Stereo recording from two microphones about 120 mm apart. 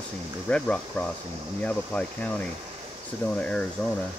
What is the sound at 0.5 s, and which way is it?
Speech, 10° left (ahead or behind).